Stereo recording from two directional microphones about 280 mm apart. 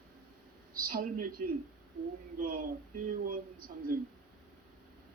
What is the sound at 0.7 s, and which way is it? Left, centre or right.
Speech, right.